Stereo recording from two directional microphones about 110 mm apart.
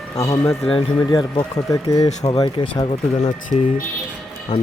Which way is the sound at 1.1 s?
40° left (ahead or behind).